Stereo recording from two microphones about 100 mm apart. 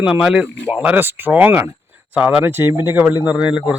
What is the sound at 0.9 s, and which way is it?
Speech, 20° right (ahead or behind).